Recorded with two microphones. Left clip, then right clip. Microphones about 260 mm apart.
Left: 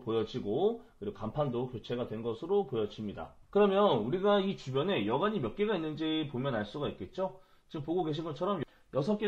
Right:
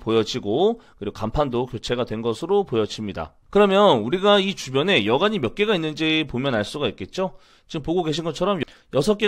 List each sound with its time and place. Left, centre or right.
0.0 s speech: right